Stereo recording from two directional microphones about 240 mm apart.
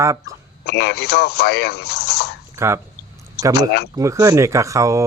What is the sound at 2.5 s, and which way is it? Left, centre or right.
Throat clearing, centre.